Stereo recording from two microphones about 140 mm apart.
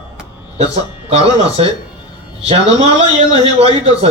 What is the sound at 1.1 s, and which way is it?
Speech, 45° right (ahead or behind).